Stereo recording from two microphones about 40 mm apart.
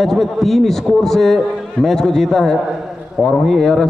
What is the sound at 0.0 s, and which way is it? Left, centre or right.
A man's voice, centre.